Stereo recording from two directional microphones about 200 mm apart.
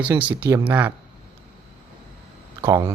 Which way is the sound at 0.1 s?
5° right (ahead or behind).